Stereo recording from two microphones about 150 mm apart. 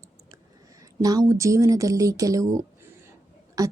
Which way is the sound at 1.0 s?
25° right (ahead or behind).